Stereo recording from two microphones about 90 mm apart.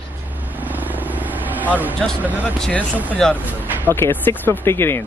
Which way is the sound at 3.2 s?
5° left (ahead or behind).